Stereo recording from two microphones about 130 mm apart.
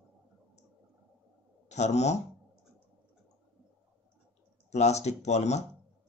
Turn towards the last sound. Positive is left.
turn(degrees=60)  # may be behind; listen again after turning